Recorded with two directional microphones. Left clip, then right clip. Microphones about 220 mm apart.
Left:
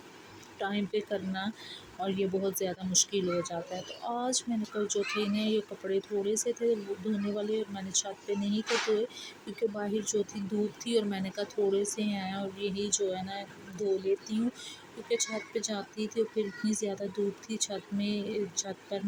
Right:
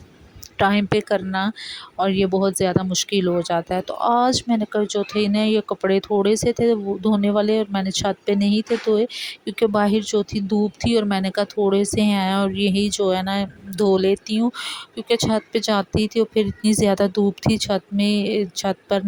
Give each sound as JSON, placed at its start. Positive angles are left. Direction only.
{"t": 0.6, "sound": "speech", "side_deg": -45}